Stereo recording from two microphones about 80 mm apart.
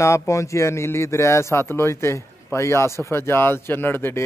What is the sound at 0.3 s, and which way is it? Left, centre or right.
Speech, left.